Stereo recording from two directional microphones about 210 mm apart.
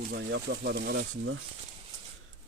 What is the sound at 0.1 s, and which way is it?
Speech, 50° right (ahead or behind).